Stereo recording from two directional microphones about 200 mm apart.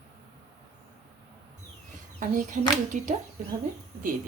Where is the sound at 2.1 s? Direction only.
40° right (ahead or behind).